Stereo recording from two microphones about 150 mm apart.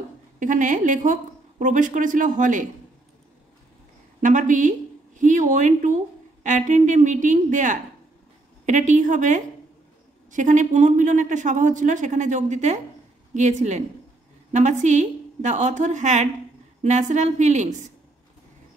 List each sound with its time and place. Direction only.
0.4 s speech: 60° right (ahead or behind)
4.2 s a woman's voice: 60° right (ahead or behind)